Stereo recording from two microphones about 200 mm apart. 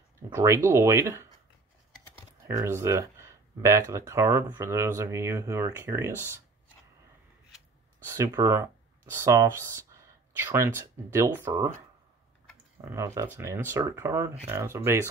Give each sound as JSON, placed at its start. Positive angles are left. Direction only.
{"t": 0.3, "sound": "speech", "side_deg": -15}
{"t": 2.4, "sound": "speech", "side_deg": -15}
{"t": 8.2, "sound": "speech", "side_deg": -15}
{"t": 12.8, "sound": "speech", "side_deg": -15}